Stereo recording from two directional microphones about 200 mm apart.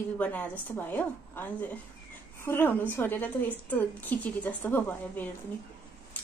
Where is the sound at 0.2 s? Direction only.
10° left (ahead or behind).